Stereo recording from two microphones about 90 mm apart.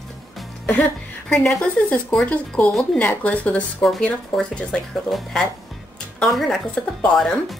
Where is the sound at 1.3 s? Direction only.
5° left (ahead or behind).